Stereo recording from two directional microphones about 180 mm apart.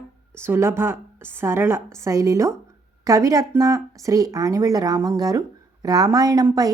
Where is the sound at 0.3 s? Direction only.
15° right (ahead or behind).